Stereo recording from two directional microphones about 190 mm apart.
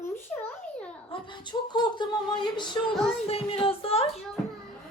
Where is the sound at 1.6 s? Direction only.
25° left (ahead or behind).